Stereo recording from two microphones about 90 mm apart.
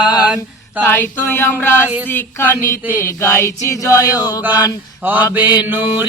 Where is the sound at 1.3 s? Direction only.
30° left (ahead or behind).